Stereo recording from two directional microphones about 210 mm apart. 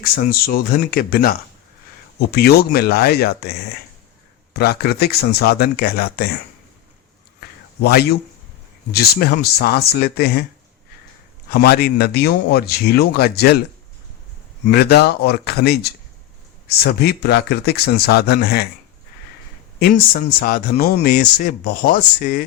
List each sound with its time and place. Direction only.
0.0 s speech: 45° left (ahead or behind)
7.8 s speech: 50° left (ahead or behind)
11.5 s speech: 45° left (ahead or behind)
14.7 s speech: 50° left (ahead or behind)
19.8 s speech: 45° left (ahead or behind)